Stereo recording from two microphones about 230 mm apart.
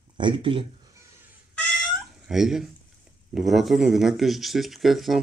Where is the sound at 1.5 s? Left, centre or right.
Centre.